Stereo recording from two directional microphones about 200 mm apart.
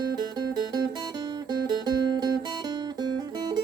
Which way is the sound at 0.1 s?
20° right (ahead or behind).